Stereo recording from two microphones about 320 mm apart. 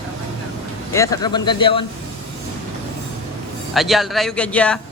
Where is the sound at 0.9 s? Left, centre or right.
Centre.